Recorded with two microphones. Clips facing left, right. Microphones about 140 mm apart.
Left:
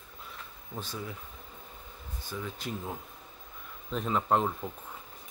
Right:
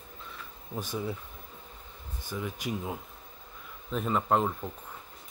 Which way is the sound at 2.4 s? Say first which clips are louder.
Right 4 dB; 10° right (ahead or behind).